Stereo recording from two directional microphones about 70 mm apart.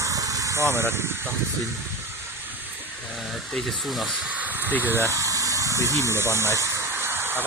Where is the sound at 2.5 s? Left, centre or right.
Right.